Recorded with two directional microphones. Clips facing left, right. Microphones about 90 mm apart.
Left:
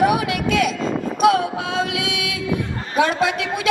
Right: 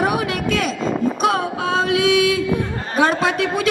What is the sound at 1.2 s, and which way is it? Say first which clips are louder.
A woman's voice: left 2 dB; 35° right (ahead or behind).